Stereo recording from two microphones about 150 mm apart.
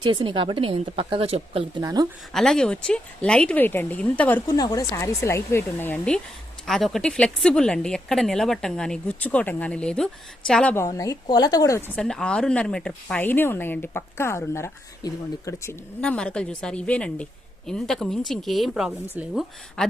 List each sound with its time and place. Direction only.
0.0 s a woman's voice: 30° right (ahead or behind)
1.8 s speech: 25° right (ahead or behind)
2.3 s speech: 5° left (ahead or behind)
4.4 s speech: 25° left (ahead or behind)
6.7 s speech: centre (ahead or behind)
10.8 s speech: 20° left (ahead or behind)
11.9 s speech: 5° left (ahead or behind)
16.0 s speech: 5° left (ahead or behind)